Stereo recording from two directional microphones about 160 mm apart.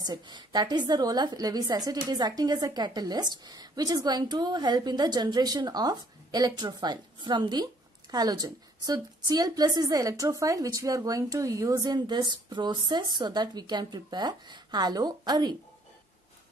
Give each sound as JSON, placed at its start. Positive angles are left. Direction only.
{"t": 0.0, "sound": "a woman's voice", "side_deg": -25}